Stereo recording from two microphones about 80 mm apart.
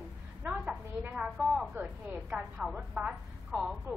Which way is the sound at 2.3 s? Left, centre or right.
Right.